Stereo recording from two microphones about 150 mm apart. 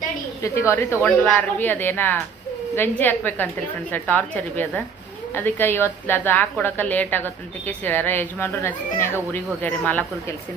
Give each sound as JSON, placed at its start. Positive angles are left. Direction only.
{"t": 0.4, "sound": "speech", "side_deg": 20}